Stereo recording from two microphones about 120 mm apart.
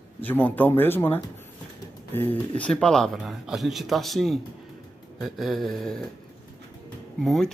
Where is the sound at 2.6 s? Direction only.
5° left (ahead or behind).